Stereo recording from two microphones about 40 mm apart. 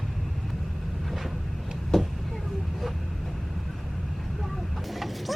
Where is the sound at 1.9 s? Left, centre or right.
Centre.